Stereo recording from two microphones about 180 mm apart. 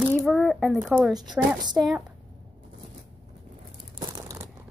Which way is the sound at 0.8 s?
5° right (ahead or behind).